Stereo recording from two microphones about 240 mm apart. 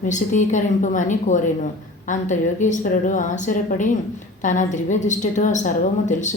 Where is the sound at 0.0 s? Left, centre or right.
Left.